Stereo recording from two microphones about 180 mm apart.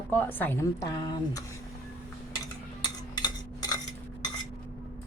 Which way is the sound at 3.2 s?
20° left (ahead or behind).